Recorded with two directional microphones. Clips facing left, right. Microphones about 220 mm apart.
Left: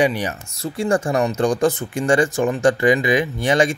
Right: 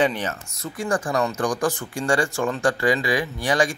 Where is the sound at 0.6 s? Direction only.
25° left (ahead or behind).